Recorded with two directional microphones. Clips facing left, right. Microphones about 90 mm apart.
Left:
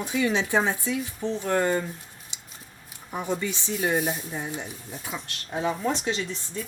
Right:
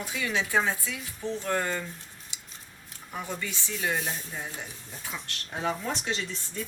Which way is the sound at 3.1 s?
25° left (ahead or behind).